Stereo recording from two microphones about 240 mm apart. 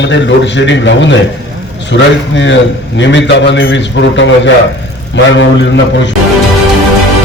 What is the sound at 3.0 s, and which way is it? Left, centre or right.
A man's voice, left.